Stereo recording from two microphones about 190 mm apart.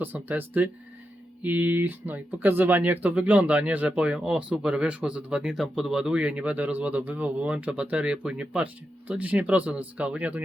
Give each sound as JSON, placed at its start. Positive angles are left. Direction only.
{"t": 0.0, "sound": "speech", "side_deg": -10}